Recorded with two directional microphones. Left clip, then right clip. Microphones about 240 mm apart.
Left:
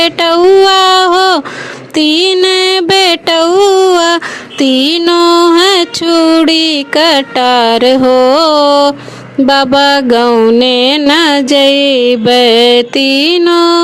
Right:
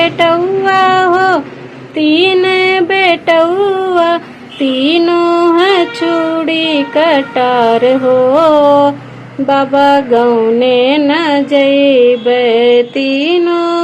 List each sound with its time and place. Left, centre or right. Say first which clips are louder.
0.0 s a sound: left 2 dB; left
2.0 s music: left 1 dB; left
9.5 s mantra: left 1 dB; left